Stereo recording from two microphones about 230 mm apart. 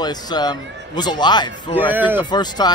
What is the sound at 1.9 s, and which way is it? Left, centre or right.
Speech, centre.